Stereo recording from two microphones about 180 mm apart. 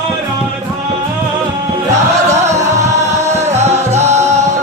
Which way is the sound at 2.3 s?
40° right (ahead or behind).